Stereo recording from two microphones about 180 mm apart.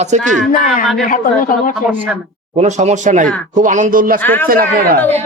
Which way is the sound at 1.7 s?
5° right (ahead or behind).